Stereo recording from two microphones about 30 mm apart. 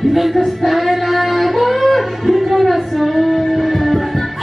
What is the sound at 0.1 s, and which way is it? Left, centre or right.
Music, centre.